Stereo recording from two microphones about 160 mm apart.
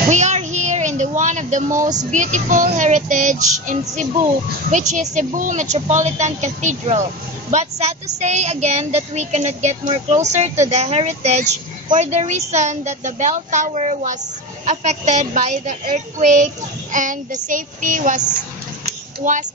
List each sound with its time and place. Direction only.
0.1 s speech: 45° right (ahead or behind)
16.9 s child singing: 55° right (ahead or behind)
19.2 s speech: 55° right (ahead or behind)